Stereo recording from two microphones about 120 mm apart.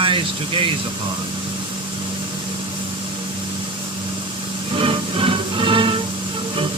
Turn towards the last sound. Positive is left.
turn(degrees=-45)  # may be behind; listen again after turning